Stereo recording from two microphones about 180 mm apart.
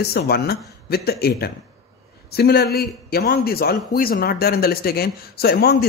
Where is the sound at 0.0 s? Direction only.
60° left (ahead or behind).